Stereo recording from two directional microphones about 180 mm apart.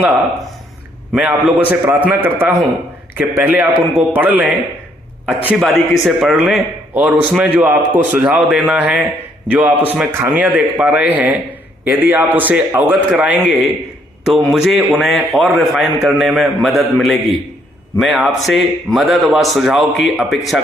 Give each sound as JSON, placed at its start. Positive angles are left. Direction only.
{"t": 1.1, "sound": "a man's voice", "side_deg": -5}